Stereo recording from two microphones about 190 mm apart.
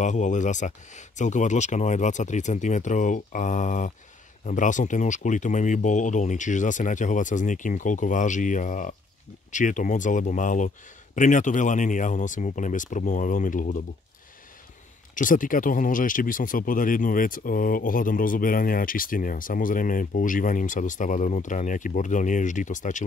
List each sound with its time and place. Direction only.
0.0 s speech: 40° left (ahead or behind)
15.1 s speech: 45° left (ahead or behind)